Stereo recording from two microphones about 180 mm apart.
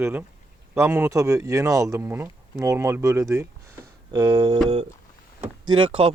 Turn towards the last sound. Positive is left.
turn(degrees=-30)  # may be behind; listen again after turning